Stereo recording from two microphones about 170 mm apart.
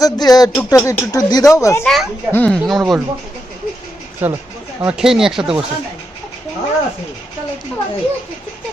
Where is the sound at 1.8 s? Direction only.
Centre (ahead or behind).